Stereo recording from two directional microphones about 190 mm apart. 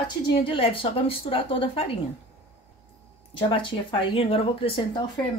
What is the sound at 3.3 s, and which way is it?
Speech, 25° left (ahead or behind).